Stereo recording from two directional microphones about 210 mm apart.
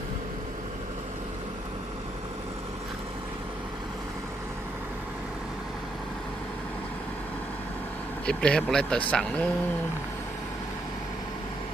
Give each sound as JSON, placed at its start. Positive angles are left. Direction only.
{"t": 8.3, "sound": "speech", "side_deg": 5}